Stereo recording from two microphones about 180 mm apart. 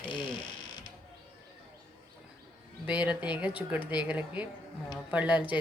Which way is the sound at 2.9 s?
5° right (ahead or behind).